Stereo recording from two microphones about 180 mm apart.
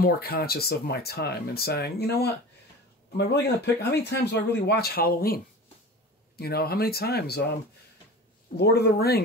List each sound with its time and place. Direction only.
0.0 s speech: 60° left (ahead or behind)
8.5 s speech: 65° left (ahead or behind)